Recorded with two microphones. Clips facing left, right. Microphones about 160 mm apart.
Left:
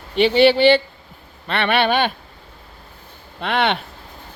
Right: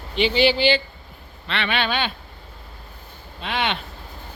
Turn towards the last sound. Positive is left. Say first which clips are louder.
# left 6 dB
turn(degrees=60)  # may be behind; listen again after turning